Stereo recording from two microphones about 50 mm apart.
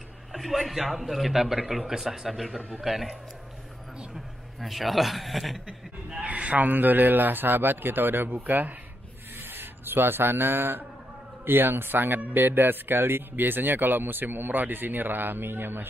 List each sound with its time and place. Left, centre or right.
0.3 s a man's voice: centre
4.6 s a man's voice: centre
5.7 s speech: centre; by 15.9 s right